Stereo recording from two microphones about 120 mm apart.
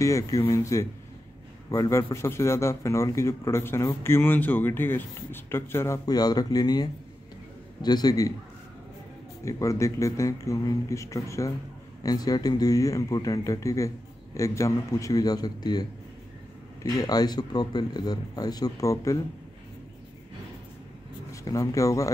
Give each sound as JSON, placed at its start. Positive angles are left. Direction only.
{"t": 0.0, "sound": "speech", "side_deg": 25}
{"t": 6.0, "sound": "speech", "side_deg": 35}
{"t": 9.4, "sound": "speech", "side_deg": 25}
{"t": 17.0, "sound": "speech", "side_deg": 35}
{"t": 21.3, "sound": "speech", "side_deg": 30}